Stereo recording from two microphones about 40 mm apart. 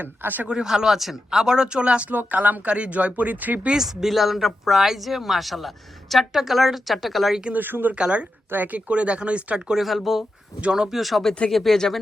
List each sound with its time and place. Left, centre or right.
0.0 s speech: right
0.4 s speech: right
0.7 s speech: centre; by 2.0 s right
2.0 s speech: right
2.7 s speech: right
3.7 s speech: centre
7.5 s speech: right
7.9 s speech: right
9.6 s speech: centre
9.8 s speech: centre